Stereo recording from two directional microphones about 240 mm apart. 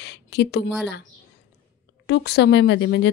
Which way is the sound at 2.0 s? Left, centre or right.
Left.